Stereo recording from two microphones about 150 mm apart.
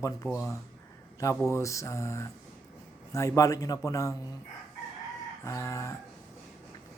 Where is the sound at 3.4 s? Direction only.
25° left (ahead or behind).